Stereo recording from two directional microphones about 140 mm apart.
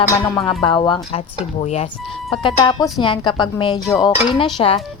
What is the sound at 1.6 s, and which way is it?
Speech, 50° left (ahead or behind).